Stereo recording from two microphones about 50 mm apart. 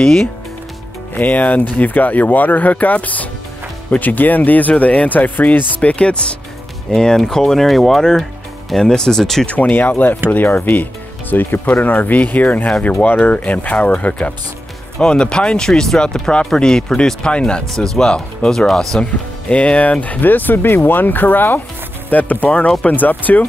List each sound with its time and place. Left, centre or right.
0.0 s speech: centre
1.1 s speech: left; by 9.5 s centre
9.5 s speech: left
9.8 s speech: left
13.3 s speech: left
15.0 s speech: centre
19.5 s speech: left